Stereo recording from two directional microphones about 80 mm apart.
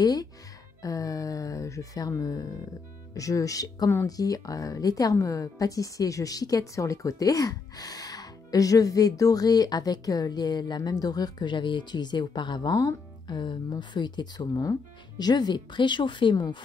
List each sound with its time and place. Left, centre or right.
0.0 s speech: left
13.4 s speech: left